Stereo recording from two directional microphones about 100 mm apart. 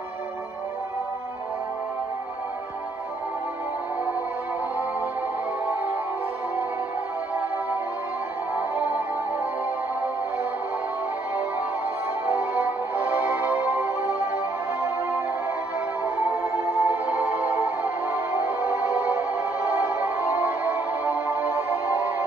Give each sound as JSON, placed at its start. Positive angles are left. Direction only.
{"t": 8.5, "sound": "music", "side_deg": -15}
{"t": 12.3, "sound": "music", "side_deg": -15}
{"t": 16.8, "sound": "music", "side_deg": -15}